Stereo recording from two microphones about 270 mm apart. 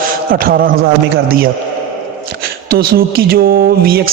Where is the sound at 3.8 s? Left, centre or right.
Right.